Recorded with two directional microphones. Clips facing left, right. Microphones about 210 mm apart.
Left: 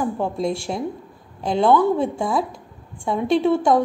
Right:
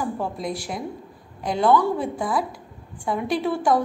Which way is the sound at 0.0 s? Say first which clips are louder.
Left 5 dB; 25° left (ahead or behind).